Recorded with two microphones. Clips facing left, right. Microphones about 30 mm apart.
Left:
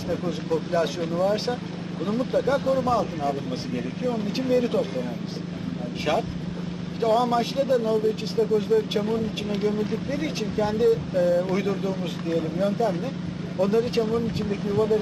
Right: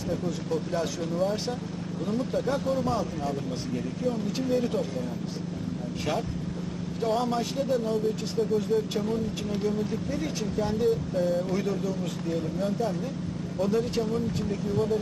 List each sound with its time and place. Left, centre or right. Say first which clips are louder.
0.1 s speech: left 4 dB; left
7.0 s speech: left 6 dB; left
11.5 s speech: left 3 dB; left